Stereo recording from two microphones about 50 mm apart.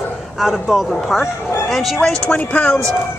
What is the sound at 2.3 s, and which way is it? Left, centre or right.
Speech, left.